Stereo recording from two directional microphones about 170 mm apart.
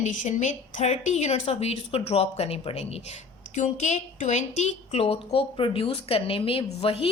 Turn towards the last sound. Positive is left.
turn(degrees=35)  # may be behind; listen again after turning